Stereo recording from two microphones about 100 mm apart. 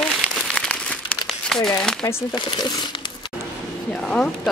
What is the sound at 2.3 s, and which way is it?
Speech, 50° left (ahead or behind).